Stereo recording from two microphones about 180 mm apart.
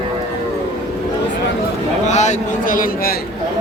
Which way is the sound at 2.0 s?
40° left (ahead or behind).